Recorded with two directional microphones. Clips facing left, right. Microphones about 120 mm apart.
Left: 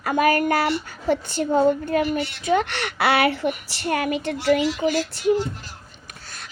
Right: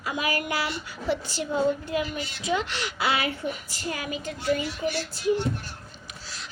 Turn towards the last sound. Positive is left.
turn(degrees=55)  # may be behind; listen again after turning